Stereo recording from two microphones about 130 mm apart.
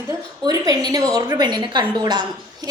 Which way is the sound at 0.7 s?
30° right (ahead or behind).